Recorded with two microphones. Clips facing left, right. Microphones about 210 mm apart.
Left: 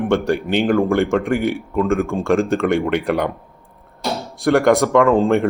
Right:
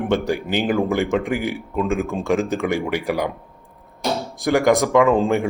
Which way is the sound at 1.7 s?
15° right (ahead or behind).